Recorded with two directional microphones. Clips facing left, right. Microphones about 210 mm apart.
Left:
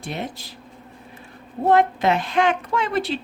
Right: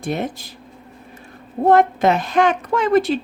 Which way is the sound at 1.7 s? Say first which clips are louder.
Right 3 dB; 45° right (ahead or behind).